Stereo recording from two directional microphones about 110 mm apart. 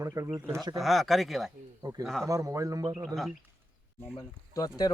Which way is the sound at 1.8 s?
35° right (ahead or behind).